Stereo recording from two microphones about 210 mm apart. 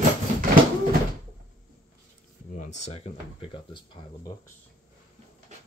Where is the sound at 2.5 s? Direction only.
35° left (ahead or behind).